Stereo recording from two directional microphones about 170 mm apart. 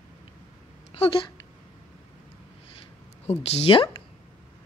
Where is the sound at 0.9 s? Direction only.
35° left (ahead or behind).